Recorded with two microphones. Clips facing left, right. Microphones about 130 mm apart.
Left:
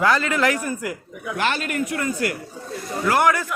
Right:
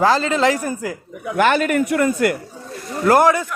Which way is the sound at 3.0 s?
40° right (ahead or behind).